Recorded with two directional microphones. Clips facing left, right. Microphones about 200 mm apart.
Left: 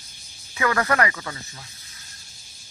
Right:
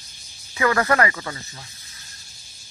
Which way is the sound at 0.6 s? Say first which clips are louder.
Right 2 dB; 10° right (ahead or behind).